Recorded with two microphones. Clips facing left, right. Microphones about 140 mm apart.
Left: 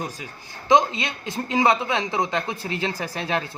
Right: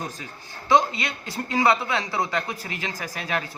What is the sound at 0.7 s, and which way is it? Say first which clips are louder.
A man's voice: left 2 dB; 20° left (ahead or behind).